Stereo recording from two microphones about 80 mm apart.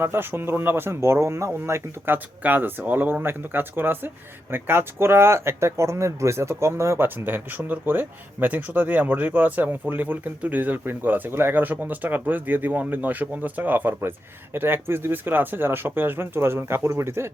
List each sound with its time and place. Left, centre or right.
0.0 s speech: right